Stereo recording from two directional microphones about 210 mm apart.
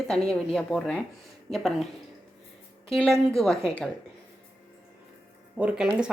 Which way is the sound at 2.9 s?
Centre (ahead or behind).